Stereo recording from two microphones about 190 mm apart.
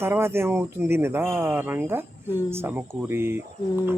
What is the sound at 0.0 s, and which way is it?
Speech, 15° right (ahead or behind).